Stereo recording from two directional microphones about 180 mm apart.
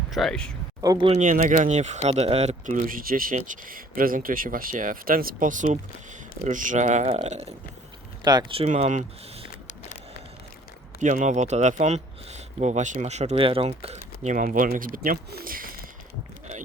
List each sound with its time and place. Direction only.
0.1 s speech: centre (ahead or behind)
0.8 s speech: 20° right (ahead or behind)
1.2 s speech: 45° right (ahead or behind)
8.2 s speech: 25° right (ahead or behind)
8.7 s speech: 45° right (ahead or behind)
11.0 s speech: 45° right (ahead or behind)